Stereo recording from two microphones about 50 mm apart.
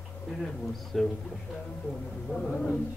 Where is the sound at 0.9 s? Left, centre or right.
Centre.